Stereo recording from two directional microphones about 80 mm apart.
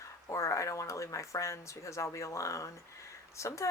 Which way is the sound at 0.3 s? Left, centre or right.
Left.